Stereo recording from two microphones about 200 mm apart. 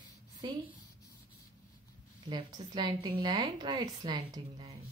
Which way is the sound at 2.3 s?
20° right (ahead or behind).